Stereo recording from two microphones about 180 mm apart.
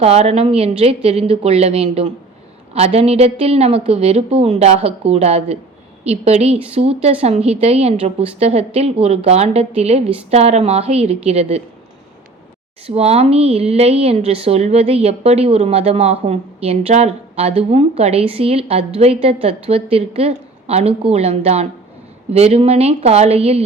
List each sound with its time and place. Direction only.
0.0 s speech: 35° right (ahead or behind)
12.9 s speech: 35° right (ahead or behind)